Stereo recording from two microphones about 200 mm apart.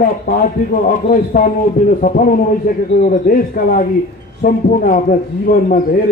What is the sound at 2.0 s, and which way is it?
A man's voice, 40° left (ahead or behind).